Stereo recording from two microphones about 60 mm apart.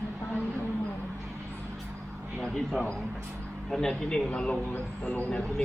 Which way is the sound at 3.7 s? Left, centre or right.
Centre.